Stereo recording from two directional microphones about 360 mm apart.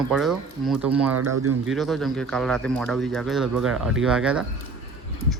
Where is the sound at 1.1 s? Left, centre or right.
Right.